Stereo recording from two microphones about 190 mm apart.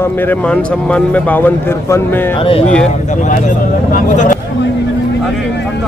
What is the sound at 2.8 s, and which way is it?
Speech, 40° left (ahead or behind).